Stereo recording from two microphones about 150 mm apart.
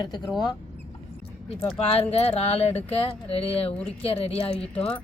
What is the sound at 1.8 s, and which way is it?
Speech, 40° left (ahead or behind).